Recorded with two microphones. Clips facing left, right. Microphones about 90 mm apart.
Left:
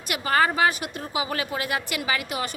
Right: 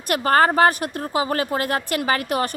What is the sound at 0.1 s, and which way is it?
A woman's voice, 45° right (ahead or behind).